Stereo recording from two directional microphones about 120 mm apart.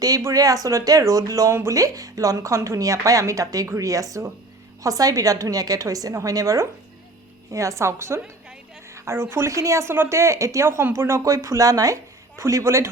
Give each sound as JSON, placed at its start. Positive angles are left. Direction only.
{"t": 0.0, "sound": "speech", "side_deg": -25}
{"t": 9.0, "sound": "a sound", "side_deg": -25}
{"t": 9.3, "sound": "speech", "side_deg": -25}